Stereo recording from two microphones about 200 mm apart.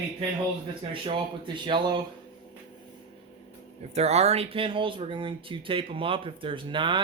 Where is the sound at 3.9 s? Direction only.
30° right (ahead or behind).